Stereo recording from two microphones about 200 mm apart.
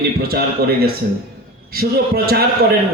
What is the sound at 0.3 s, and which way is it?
A man's voice, 50° right (ahead or behind).